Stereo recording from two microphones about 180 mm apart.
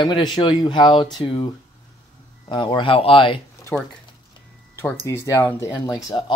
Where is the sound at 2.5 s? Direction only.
25° left (ahead or behind).